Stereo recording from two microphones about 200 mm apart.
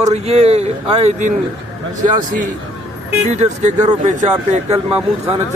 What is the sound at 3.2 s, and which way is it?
Speech, 35° right (ahead or behind).